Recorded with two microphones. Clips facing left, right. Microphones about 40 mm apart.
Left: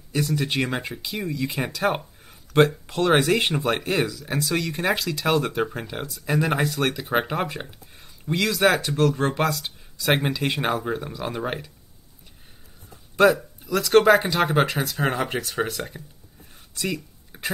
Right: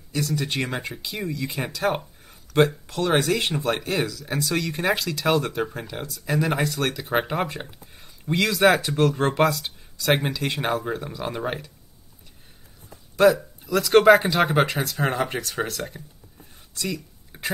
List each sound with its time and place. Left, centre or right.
0.1 s speech: centre
13.2 s speech: centre
16.7 s a sound: centre